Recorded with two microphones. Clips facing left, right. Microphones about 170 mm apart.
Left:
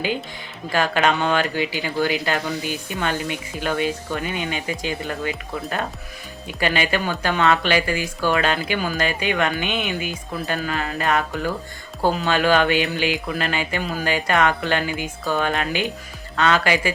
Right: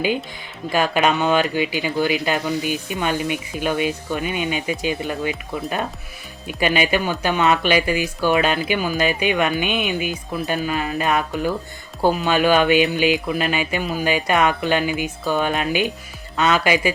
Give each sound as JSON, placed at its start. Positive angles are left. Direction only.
{"t": 0.7, "sound": "speech", "side_deg": -15}